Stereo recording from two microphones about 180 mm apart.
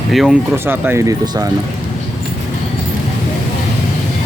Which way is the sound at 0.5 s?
15° right (ahead or behind).